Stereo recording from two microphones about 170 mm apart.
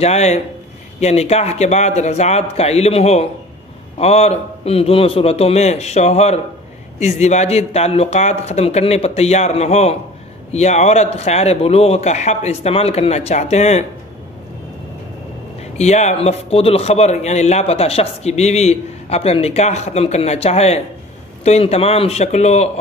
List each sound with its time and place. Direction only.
0.0 s a man's voice: 40° left (ahead or behind)
15.6 s a man's voice: 40° left (ahead or behind)